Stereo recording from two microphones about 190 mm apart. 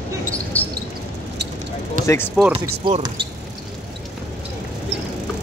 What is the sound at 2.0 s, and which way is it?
Speech, 10° left (ahead or behind).